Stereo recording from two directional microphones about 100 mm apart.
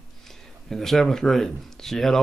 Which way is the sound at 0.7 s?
5° left (ahead or behind).